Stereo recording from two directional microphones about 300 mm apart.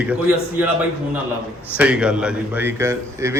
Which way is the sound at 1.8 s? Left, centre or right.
Centre.